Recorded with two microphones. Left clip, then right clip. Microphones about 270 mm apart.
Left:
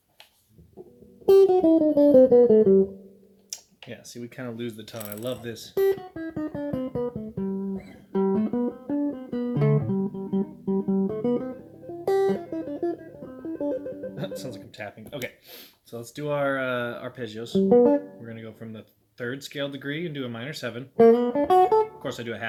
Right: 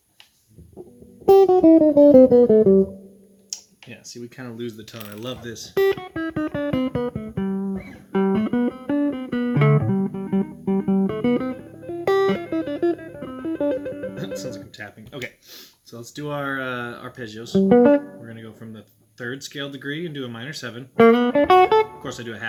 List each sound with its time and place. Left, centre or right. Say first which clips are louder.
1.2 s music: right 4 dB; right
3.5 s speech: right 3 dB; centre
5.7 s music: right 4 dB; right
14.2 s a sound: right 4 dB; centre
17.5 s music: right 4 dB; right
18.3 s speech: even; centre
20.9 s music: right 3 dB; right
22.0 s speech: even; centre